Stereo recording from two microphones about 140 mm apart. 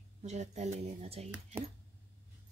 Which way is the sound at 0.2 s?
55° right (ahead or behind).